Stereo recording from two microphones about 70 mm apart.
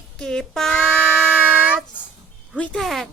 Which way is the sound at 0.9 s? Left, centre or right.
Right.